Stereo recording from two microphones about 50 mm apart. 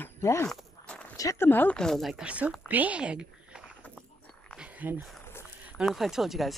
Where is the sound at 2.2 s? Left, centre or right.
Right.